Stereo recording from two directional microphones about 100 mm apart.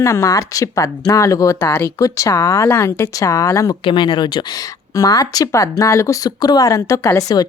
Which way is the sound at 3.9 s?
50° left (ahead or behind).